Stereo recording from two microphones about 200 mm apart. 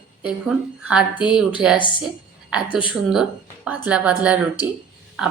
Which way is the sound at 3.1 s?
5° right (ahead or behind).